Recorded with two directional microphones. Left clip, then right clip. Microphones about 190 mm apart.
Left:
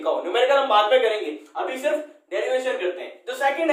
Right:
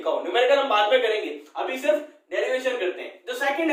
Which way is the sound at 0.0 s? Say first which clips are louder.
Left 1 dB; 25° left (ahead or behind).